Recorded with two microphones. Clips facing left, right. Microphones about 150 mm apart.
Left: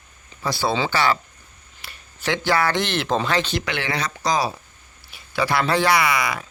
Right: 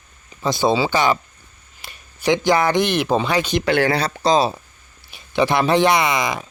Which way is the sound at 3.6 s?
40° right (ahead or behind).